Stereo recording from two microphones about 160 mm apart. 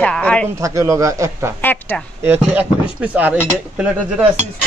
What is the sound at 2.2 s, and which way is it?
Speech, 10° right (ahead or behind).